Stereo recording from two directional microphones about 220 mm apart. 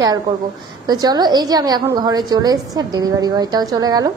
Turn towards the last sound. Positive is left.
turn(degrees=-15)  # may be behind; listen again after turning